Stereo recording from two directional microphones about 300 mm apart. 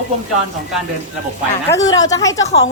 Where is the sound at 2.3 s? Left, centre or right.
Left.